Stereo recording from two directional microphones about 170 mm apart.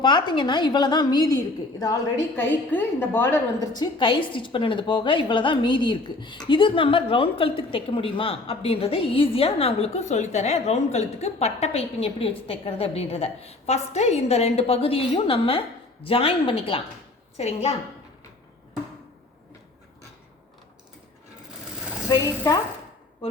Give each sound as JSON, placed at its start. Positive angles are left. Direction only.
{"t": 0.0, "sound": "a woman's voice", "side_deg": 25}
{"t": 22.1, "sound": "a woman's voice", "side_deg": 20}